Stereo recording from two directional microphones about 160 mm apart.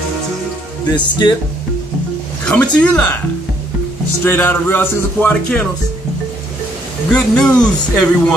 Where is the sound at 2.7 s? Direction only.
5° left (ahead or behind).